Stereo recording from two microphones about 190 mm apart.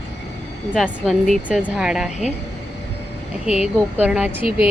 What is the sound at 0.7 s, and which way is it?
Speech, centre (ahead or behind).